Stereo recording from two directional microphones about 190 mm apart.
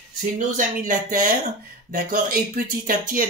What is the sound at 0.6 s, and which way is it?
Speech, 45° right (ahead or behind).